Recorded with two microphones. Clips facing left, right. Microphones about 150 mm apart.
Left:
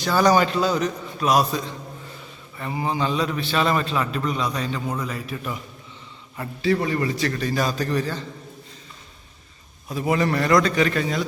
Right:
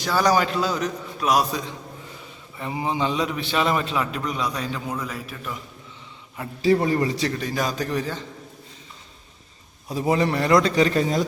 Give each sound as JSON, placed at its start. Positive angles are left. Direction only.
{"t": 0.3, "sound": "a man's voice", "side_deg": -5}
{"t": 6.6, "sound": "a man's voice", "side_deg": -40}
{"t": 10.0, "sound": "a man's voice", "side_deg": -25}